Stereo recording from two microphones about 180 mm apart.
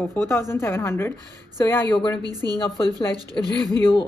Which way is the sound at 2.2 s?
20° right (ahead or behind).